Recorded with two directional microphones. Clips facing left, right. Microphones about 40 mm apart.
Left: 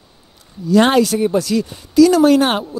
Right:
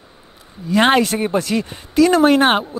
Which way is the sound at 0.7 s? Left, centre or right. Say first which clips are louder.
Left 2 dB; right.